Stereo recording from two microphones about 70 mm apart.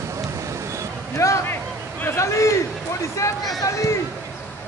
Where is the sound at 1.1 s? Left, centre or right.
Left.